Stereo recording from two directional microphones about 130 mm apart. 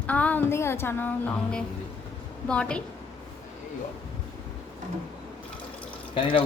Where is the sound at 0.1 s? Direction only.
10° left (ahead or behind).